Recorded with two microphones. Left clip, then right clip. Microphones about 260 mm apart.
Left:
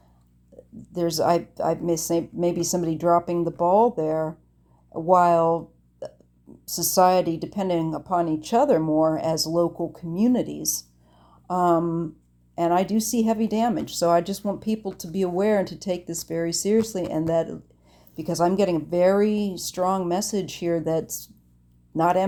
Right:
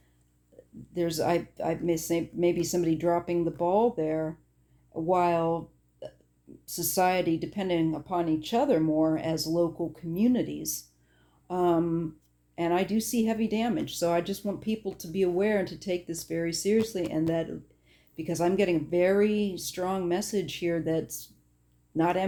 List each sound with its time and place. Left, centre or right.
0.9 s speech: left